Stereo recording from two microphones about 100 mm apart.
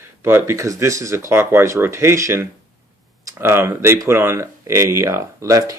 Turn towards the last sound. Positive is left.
turn(degrees=-30)  # may be behind; listen again after turning